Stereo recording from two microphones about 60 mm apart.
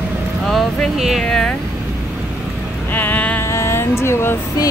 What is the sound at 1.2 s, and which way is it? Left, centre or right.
Speech, centre.